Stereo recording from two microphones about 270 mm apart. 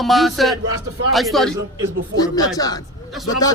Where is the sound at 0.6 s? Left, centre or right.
Right.